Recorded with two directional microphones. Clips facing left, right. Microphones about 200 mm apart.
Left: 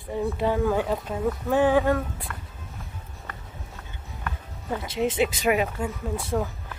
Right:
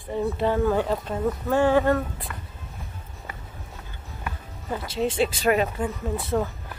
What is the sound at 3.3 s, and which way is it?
Music, 10° right (ahead or behind).